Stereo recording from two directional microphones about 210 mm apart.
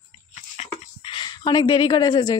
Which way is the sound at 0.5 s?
25° left (ahead or behind).